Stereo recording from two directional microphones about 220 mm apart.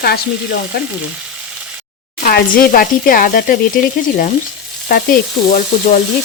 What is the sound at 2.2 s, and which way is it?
Speech, 40° left (ahead or behind).